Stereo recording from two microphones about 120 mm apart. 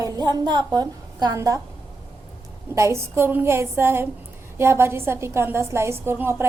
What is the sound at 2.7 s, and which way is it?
A woman's voice, 25° right (ahead or behind).